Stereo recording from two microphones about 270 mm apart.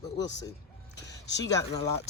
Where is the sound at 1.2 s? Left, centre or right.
Left.